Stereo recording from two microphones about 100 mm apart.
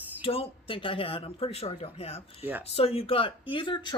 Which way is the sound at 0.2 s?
70° left (ahead or behind).